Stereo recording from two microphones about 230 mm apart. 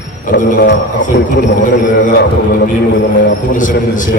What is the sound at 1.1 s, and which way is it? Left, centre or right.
Speech, left.